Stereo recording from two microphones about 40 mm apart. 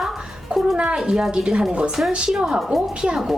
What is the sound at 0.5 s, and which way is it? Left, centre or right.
A woman's voice, right.